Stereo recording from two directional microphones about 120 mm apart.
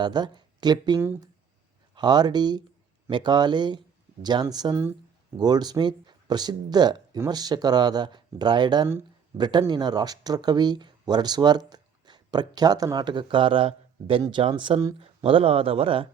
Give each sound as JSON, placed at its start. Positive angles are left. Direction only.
{"t": 0.0, "sound": "speech", "side_deg": -40}